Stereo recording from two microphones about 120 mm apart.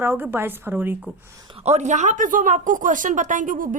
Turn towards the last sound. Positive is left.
turn(degrees=-90)